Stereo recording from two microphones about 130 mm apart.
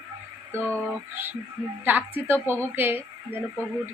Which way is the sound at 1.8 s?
15° right (ahead or behind).